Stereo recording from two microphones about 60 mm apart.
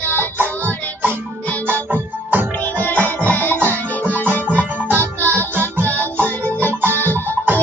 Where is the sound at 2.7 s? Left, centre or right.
Centre.